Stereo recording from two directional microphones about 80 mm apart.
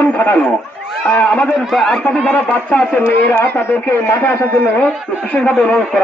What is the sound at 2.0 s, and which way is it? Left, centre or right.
Speech, centre.